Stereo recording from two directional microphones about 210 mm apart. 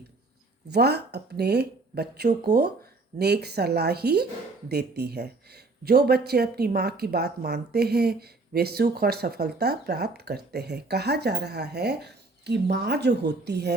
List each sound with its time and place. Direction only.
0.7 s speech: 50° right (ahead or behind)